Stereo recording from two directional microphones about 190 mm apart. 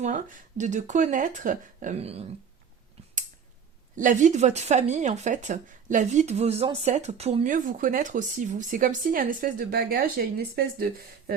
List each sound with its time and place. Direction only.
0.0 s speech: 40° right (ahead or behind)
3.9 s speech: 40° right (ahead or behind)